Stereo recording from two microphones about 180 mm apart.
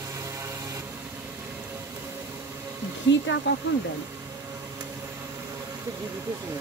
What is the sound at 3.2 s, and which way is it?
Speech, 75° left (ahead or behind).